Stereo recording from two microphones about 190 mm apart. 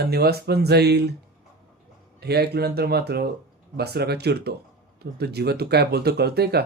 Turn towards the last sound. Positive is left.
turn(degrees=-60)  # may be behind; listen again after turning